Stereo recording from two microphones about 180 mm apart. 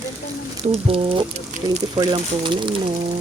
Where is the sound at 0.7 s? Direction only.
30° right (ahead or behind).